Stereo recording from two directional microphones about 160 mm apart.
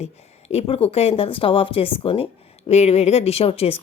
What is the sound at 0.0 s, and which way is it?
Speech, 40° left (ahead or behind).